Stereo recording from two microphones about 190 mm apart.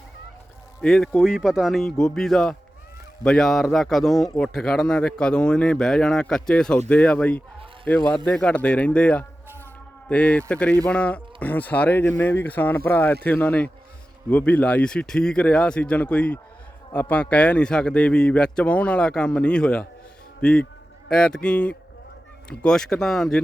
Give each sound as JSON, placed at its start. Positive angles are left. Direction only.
{"t": 0.8, "sound": "speech", "side_deg": 5}